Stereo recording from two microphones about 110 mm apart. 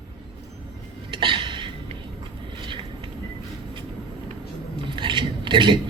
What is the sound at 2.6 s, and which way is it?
Vehicle, 50° right (ahead or behind).